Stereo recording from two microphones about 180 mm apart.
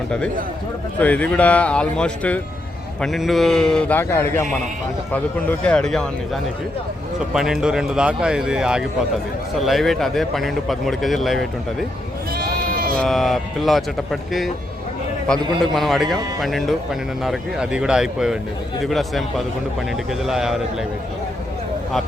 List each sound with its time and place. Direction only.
0.9 s speech: 10° left (ahead or behind)
12.4 s sheep: 55° right (ahead or behind)
13.0 s speech: centre (ahead or behind)